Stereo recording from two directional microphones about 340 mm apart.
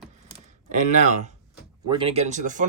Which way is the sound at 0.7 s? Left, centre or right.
Right.